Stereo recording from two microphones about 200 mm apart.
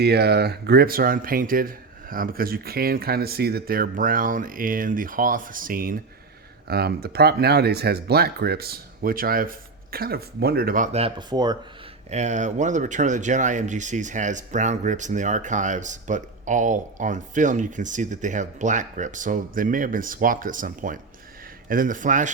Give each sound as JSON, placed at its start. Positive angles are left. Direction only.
{"t": 0.0, "sound": "speech", "side_deg": -55}
{"t": 10.9, "sound": "speech", "side_deg": -25}
{"t": 12.1, "sound": "speech", "side_deg": -35}